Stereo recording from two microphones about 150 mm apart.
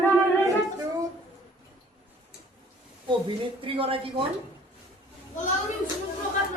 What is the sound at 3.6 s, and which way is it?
Speech, 35° right (ahead or behind).